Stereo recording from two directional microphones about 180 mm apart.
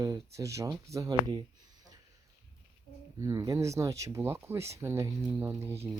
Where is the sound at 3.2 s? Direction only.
20° right (ahead or behind).